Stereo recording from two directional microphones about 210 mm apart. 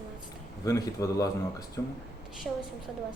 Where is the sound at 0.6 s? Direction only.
15° left (ahead or behind).